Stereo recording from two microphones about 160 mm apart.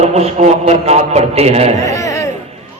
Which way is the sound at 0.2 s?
40° right (ahead or behind).